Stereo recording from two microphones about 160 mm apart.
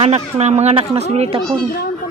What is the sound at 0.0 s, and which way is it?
Speech, 45° right (ahead or behind).